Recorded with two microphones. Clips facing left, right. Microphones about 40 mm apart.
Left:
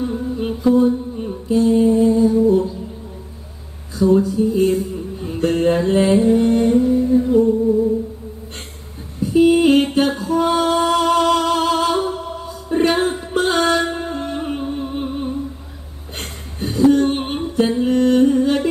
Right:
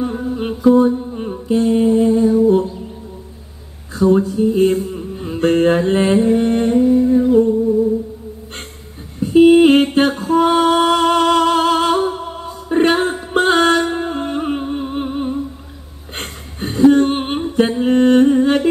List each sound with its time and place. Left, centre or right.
0.0 s mantra: right
0.7 s music: right
3.9 s a sound: right
5.3 s mantra: right
6.7 s humming: right
9.2 s a sound: right
9.9 s music: right
16.2 s a sound: right
17.6 s humming: right